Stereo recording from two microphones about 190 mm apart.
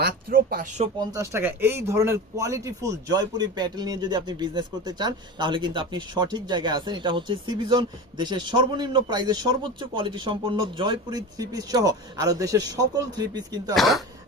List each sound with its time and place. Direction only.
0.0 s speech: 55° right (ahead or behind)
0.9 s speech: 15° right (ahead or behind)
13.7 s speech: centre (ahead or behind)